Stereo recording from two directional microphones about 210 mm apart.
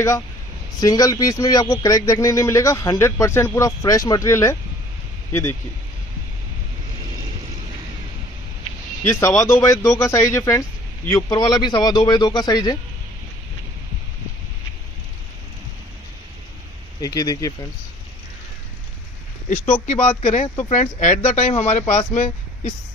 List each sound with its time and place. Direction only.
0.7 s a man's voice: 15° left (ahead or behind)
9.0 s a man's voice: 15° left (ahead or behind)
17.0 s a man's voice: 15° left (ahead or behind)
19.5 s speech: 35° left (ahead or behind)